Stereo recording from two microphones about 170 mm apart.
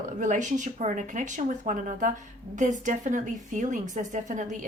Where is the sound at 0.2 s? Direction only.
45° right (ahead or behind).